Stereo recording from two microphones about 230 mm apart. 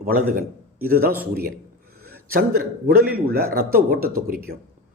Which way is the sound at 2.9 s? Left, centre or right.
Right.